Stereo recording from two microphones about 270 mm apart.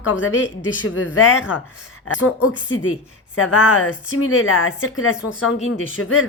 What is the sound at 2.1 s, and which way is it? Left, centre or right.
A woman's voice, left.